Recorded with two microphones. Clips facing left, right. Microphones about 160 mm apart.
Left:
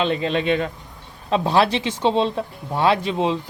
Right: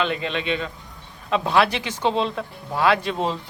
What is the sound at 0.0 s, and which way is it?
Speech, 35° left (ahead or behind).